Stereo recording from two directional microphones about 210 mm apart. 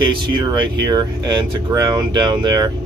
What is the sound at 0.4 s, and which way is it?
Speech, 20° right (ahead or behind).